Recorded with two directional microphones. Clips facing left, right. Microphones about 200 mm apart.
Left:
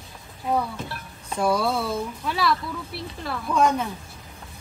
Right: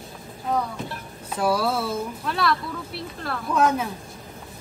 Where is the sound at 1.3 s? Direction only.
5° right (ahead or behind).